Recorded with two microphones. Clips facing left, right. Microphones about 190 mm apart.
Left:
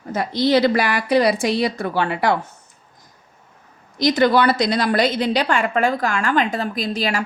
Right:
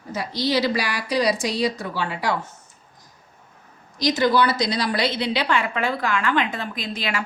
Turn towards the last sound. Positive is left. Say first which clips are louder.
# left 6 dB
turn(degrees=40)  # may be behind; listen again after turning